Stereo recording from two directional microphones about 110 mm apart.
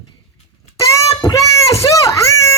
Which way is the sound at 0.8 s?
30° left (ahead or behind).